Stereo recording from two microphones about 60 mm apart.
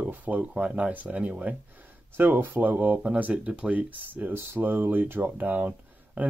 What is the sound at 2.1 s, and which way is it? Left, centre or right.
Speech, right.